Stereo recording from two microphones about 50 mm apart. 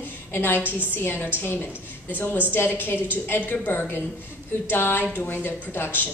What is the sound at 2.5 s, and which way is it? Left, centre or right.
A woman's voice, left.